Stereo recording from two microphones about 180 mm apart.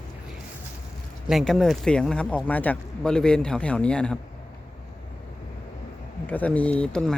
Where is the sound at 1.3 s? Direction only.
Centre (ahead or behind).